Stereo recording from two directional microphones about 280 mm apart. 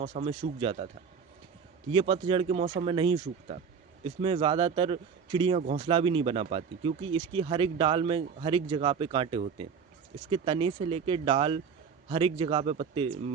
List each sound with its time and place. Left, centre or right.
0.0 s speech: right
1.9 s speech: centre